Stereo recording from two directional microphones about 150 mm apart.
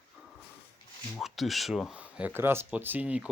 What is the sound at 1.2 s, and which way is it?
Speech, centre (ahead or behind).